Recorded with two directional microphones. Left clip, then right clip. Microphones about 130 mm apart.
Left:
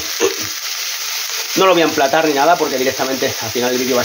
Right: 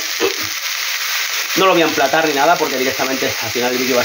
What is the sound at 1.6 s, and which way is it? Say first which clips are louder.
Speech: left 1 dB; 30° left (ahead or behind).